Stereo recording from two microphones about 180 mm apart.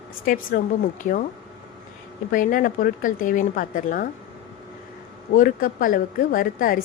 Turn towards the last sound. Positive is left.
turn(degrees=50)  # may be behind; listen again after turning